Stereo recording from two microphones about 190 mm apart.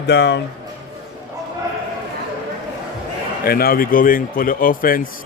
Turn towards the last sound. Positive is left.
turn(degrees=50)  # may be behind; listen again after turning